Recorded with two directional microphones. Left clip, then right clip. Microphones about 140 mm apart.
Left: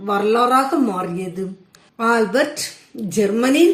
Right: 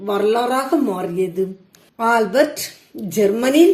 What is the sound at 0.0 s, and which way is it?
A woman's voice, 40° right (ahead or behind).